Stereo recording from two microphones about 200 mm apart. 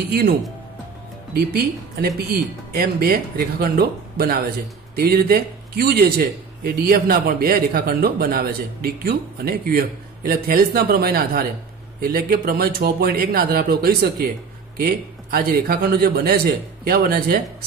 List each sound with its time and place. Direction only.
0.1 s a man's voice: 50° right (ahead or behind)
15.3 s a man's voice: 45° right (ahead or behind)